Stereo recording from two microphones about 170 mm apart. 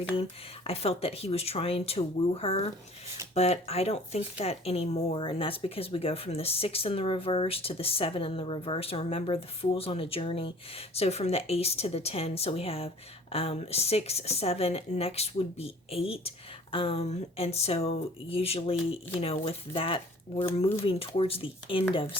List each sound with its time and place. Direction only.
0.2 s speech: 35° left (ahead or behind)